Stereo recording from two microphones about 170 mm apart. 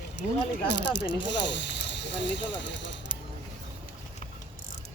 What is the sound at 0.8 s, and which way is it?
Speech, 90° left.